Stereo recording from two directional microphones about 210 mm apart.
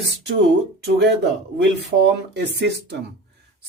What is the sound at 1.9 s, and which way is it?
Speech, 55° right (ahead or behind).